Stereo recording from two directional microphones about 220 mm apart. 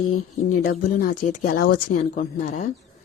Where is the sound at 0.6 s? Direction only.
40° left (ahead or behind).